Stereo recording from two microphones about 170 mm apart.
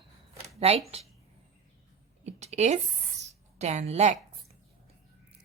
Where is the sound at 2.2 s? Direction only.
40° right (ahead or behind).